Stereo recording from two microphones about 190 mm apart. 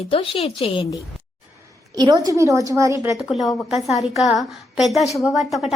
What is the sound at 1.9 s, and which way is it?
A woman's voice, 20° right (ahead or behind).